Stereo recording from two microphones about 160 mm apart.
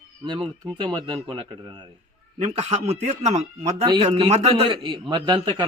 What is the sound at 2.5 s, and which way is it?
Speech, 40° right (ahead or behind).